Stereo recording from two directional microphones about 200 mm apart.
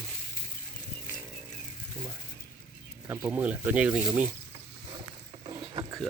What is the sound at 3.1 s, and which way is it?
Speech, 10° right (ahead or behind).